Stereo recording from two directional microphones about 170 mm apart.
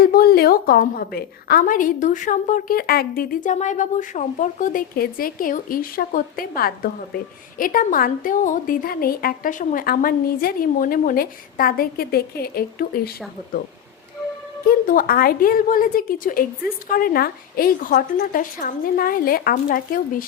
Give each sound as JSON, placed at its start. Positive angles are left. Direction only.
{"t": 0.0, "sound": "a woman's voice", "side_deg": 60}
{"t": 14.8, "sound": "a woman's voice", "side_deg": 55}